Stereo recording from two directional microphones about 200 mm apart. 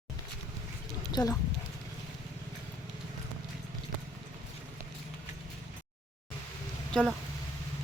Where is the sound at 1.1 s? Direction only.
15° left (ahead or behind).